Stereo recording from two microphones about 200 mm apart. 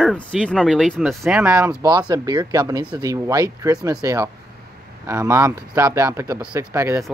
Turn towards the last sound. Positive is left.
turn(degrees=-15)  # may be behind; listen again after turning